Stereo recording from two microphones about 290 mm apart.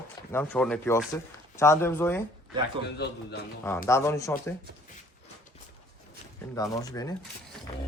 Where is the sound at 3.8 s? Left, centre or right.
Centre.